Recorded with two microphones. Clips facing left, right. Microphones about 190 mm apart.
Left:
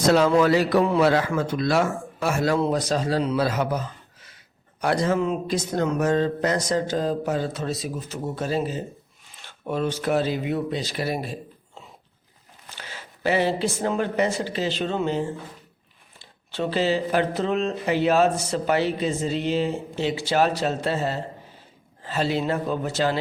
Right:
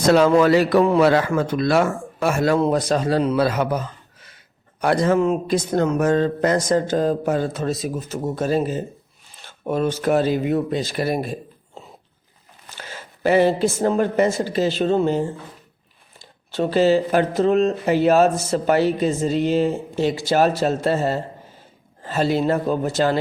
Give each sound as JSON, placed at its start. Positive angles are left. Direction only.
{"t": 0.1, "sound": "speech", "side_deg": -65}
{"t": 4.8, "sound": "speech", "side_deg": -55}